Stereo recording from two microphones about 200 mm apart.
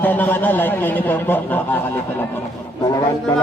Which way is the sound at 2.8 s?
20° left (ahead or behind).